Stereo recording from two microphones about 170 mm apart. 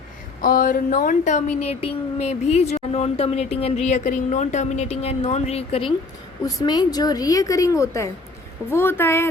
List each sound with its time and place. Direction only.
0.4 s speech: 55° left (ahead or behind); by 5.9 s 35° left (ahead or behind)
6.4 s a woman's voice: 25° left (ahead or behind)